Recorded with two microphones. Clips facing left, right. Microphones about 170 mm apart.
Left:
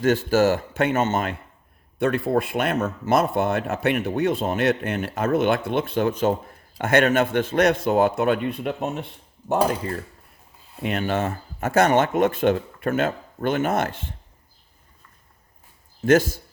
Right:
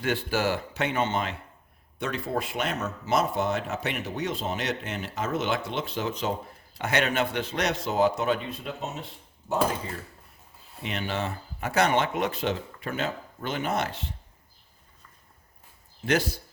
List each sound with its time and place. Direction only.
0.0 s speech: 45° left (ahead or behind); by 9.0 s 60° left (ahead or behind)
10.8 s speech: 50° left (ahead or behind)
16.0 s speech: 45° left (ahead or behind)